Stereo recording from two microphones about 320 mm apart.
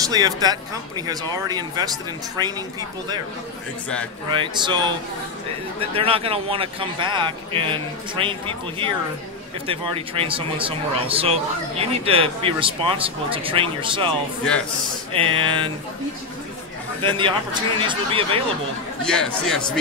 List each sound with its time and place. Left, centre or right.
0.0 s a man's voice: centre
4.3 s a man's voice: centre
5.9 s a man's voice: centre
15.1 s a man's voice: centre
17.0 s a man's voice: centre
19.0 s a man's voice: centre